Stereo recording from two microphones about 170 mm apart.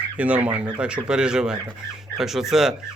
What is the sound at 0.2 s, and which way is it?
Speech, 10° right (ahead or behind).